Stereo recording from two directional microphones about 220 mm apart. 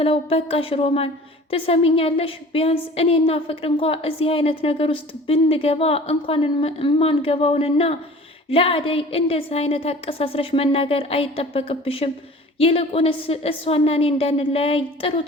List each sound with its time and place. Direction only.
0.0 s a woman's voice: 25° left (ahead or behind)